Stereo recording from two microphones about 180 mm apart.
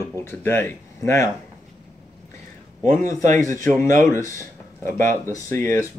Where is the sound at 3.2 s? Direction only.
45° right (ahead or behind).